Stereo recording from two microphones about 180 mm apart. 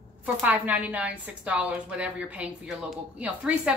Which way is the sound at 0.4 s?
10° right (ahead or behind).